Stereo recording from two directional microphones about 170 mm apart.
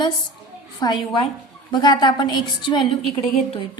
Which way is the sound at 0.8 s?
30° left (ahead or behind).